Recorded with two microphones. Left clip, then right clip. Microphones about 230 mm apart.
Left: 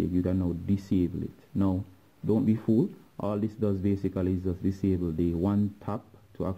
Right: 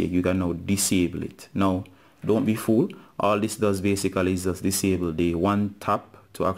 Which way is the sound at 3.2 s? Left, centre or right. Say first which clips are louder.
Right 8 dB; centre.